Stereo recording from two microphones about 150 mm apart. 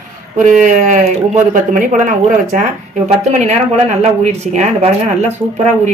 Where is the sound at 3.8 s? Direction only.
50° right (ahead or behind).